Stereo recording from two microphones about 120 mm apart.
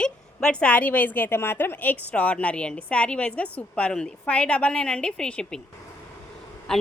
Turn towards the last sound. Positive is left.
turn(degrees=5)  # may be behind; listen again after turning